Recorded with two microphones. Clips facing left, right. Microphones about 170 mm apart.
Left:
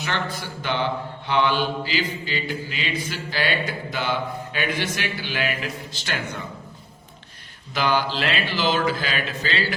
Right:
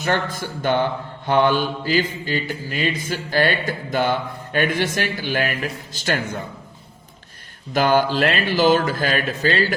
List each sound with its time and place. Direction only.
0.0 s mantra: 45° right (ahead or behind)
7.7 s mantra: 50° right (ahead or behind)